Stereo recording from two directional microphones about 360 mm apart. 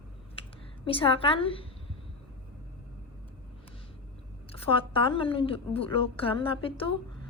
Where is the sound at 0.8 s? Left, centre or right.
Centre.